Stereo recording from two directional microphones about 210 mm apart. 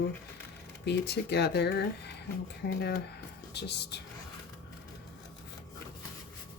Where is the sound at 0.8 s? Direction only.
55° left (ahead or behind).